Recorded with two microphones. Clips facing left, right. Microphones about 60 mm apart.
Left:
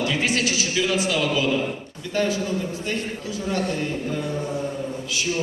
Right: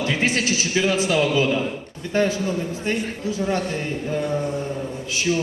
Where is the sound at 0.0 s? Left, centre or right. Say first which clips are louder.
Right 1 dB; right.